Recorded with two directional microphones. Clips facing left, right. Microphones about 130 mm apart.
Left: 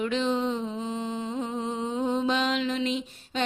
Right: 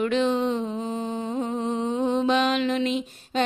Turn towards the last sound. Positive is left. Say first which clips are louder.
# right 5 dB
turn(degrees=-60)  # may be behind; listen again after turning